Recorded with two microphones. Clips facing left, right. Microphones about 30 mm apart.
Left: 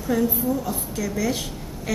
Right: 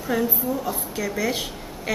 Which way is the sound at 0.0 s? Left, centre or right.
Centre.